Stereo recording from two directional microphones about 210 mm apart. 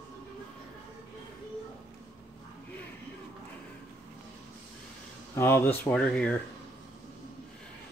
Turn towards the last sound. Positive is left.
turn(degrees=5)  # may be behind; listen again after turning